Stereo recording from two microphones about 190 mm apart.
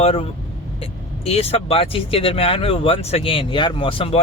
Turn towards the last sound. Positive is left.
turn(degrees=30)  # may be behind; listen again after turning